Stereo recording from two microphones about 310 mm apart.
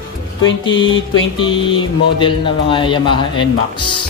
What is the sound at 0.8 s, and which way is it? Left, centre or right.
Speech, centre.